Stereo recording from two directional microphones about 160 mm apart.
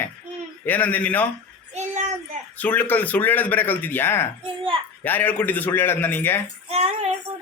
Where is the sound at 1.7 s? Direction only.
45° right (ahead or behind).